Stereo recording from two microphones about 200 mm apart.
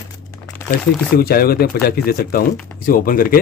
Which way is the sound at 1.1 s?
50° left (ahead or behind).